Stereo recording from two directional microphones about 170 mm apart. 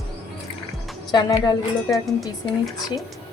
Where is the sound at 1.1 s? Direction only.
25° left (ahead or behind).